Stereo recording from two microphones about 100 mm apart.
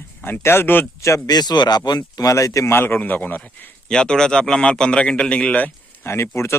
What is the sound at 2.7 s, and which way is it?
Speech, 20° left (ahead or behind).